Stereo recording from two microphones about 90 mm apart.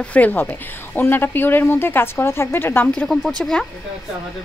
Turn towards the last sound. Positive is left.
turn(degrees=5)  # may be behind; listen again after turning